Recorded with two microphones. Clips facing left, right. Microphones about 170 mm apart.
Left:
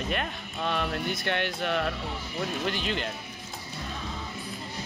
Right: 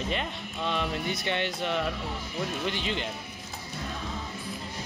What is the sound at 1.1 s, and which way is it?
Speech, 55° left (ahead or behind).